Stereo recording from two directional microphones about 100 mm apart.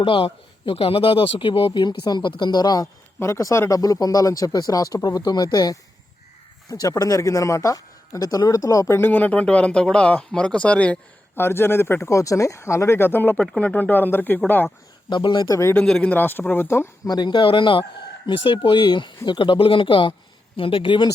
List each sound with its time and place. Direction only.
0.0 s speech: 60° left (ahead or behind)
1.8 s speech: 45° left (ahead or behind)
3.2 s speech: 30° left (ahead or behind)
9.0 s speech: 20° left (ahead or behind)
11.3 s speech: 25° left (ahead or behind)
13.4 s speech: 10° left (ahead or behind)
15.1 s speech: 50° left (ahead or behind)
15.7 s speech: 10° left (ahead or behind)
17.1 s speech: 50° left (ahead or behind)